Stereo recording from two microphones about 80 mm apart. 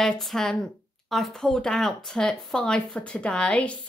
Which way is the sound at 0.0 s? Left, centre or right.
Centre.